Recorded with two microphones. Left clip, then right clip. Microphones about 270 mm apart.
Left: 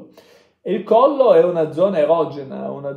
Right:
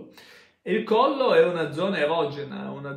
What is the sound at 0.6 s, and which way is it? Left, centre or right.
A man's voice, centre.